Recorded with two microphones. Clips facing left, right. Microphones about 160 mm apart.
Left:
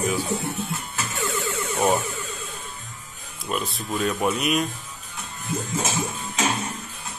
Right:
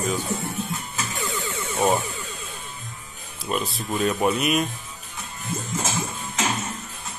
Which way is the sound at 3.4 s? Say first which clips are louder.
Right 1 dB; centre (ahead or behind).